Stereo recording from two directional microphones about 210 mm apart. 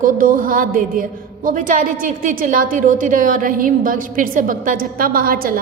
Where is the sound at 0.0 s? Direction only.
40° right (ahead or behind).